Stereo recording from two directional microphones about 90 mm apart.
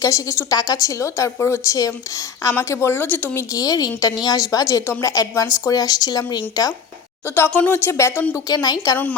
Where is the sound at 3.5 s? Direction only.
45° left (ahead or behind).